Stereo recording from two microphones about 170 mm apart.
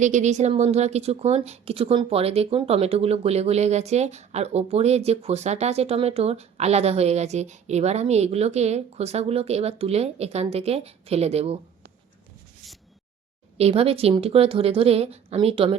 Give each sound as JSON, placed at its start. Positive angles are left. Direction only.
{"t": 0.0, "sound": "speech", "side_deg": -45}
{"t": 13.6, "sound": "speech", "side_deg": -35}